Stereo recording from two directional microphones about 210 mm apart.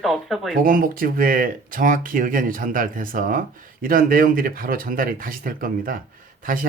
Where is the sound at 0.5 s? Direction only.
40° right (ahead or behind).